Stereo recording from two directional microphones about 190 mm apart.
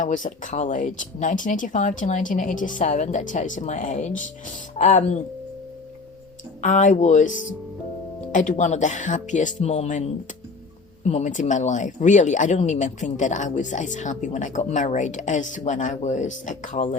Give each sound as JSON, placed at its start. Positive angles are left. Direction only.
{"t": 0.0, "sound": "speech", "side_deg": 40}
{"t": 6.6, "sound": "speech", "side_deg": 40}